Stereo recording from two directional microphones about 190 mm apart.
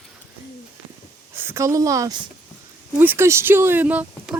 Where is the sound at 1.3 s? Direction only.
10° right (ahead or behind).